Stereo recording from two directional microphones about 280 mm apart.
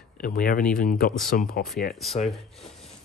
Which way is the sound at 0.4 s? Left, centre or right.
Left.